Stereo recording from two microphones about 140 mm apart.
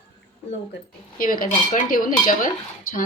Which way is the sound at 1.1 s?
90° left.